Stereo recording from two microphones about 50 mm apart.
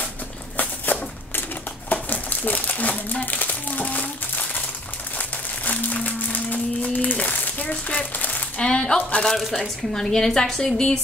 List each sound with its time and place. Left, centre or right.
0.6 s a sound: left
1.9 s crumpling: left
5.7 s music: left
6.0 s a sound: left
8.5 s speech: centre
9.4 s speech: centre
9.9 s a woman's voice: centre